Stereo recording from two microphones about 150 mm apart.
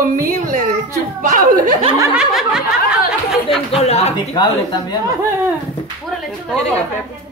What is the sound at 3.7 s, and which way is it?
Speech, 45° left (ahead or behind).